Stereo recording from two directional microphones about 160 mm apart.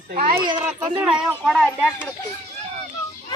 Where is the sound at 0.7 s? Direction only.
10° right (ahead or behind); by 1.9 s 5° left (ahead or behind).